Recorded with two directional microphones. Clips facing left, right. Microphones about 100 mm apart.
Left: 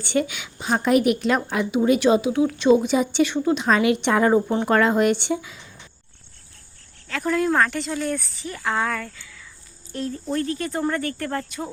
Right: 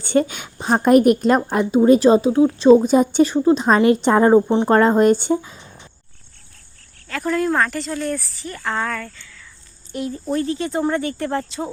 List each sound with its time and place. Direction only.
0.0 s a woman's voice: 40° right (ahead or behind)
7.1 s a woman's voice: centre (ahead or behind)
9.9 s speech: 10° right (ahead or behind)
10.4 s speech: 20° right (ahead or behind)